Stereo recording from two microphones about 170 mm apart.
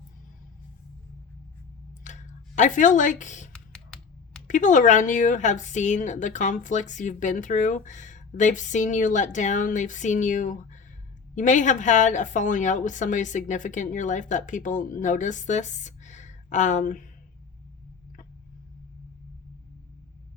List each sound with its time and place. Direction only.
2.0 s a sound: 45° left (ahead or behind)
3.5 s typing: 5° left (ahead or behind)
4.4 s a woman's voice: 50° left (ahead or behind)